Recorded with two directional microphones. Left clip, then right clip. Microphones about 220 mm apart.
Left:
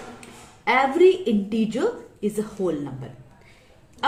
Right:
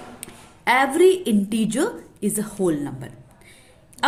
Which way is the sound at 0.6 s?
45° right (ahead or behind).